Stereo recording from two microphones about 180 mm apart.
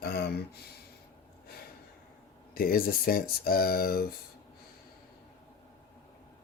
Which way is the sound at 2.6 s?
55° left (ahead or behind).